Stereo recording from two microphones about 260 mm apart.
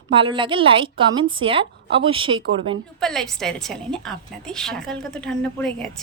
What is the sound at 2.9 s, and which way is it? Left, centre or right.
A woman's voice, centre.